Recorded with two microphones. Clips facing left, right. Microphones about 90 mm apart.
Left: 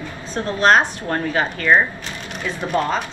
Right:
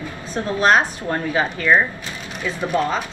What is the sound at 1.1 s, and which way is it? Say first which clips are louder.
Speech: even; 15° right (ahead or behind).